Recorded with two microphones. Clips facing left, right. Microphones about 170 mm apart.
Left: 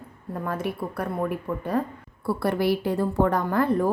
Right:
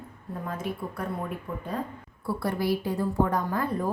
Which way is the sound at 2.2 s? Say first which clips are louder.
Left 4 dB; 65° left (ahead or behind).